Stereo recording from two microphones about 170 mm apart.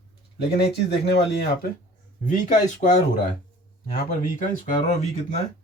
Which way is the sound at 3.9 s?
50° left (ahead or behind).